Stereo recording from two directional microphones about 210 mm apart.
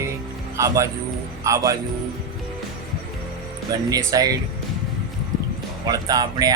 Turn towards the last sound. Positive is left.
turn(degrees=-20)  # may be behind; listen again after turning